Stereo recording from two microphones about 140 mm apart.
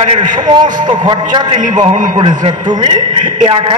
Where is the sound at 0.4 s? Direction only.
35° right (ahead or behind).